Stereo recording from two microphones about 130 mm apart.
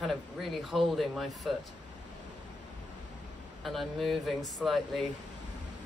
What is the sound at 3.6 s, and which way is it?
Speech, centre (ahead or behind).